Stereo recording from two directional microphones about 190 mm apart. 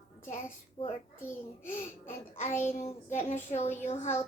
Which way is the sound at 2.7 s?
35° left (ahead or behind).